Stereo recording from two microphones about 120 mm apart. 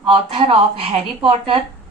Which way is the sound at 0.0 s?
50° right (ahead or behind).